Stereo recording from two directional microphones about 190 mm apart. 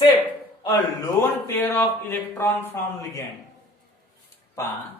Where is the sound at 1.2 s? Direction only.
10° left (ahead or behind).